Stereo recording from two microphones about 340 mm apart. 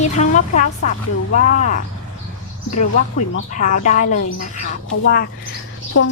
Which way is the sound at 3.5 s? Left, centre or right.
Left.